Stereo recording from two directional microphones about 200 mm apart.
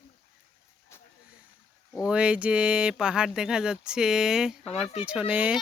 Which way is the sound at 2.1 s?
5° right (ahead or behind).